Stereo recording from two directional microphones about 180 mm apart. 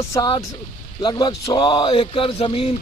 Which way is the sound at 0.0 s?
20° left (ahead or behind).